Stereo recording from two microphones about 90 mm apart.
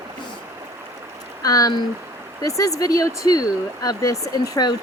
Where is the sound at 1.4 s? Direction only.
45° left (ahead or behind).